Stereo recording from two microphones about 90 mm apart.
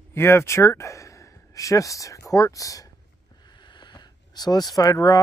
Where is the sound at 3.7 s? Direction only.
55° left (ahead or behind).